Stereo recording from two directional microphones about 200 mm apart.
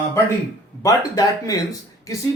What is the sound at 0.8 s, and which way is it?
Speech, 15° left (ahead or behind).